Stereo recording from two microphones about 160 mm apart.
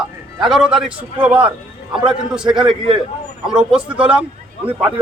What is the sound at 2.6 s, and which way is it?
Speech, 30° right (ahead or behind).